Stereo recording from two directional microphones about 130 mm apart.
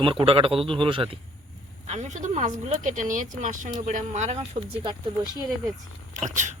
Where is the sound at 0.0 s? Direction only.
40° right (ahead or behind).